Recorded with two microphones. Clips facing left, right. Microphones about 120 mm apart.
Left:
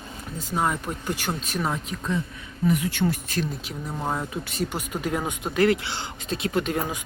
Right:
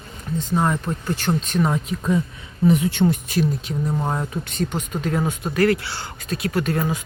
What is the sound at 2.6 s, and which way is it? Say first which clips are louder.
Speech: right 6 dB; 25° right (ahead or behind).